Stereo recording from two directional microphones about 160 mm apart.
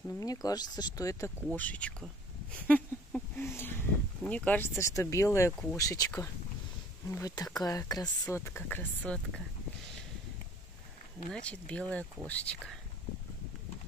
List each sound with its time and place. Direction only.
0.2 s speech: 25° left (ahead or behind)
1.5 s speech: 10° left (ahead or behind)
11.3 s speech: 5° left (ahead or behind)